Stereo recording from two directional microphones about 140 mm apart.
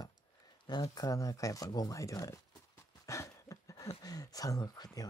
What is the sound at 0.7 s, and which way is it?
Speech, 30° left (ahead or behind).